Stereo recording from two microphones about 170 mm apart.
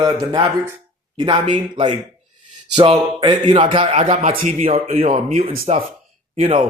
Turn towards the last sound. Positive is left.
turn(degrees=-40)  # may be behind; listen again after turning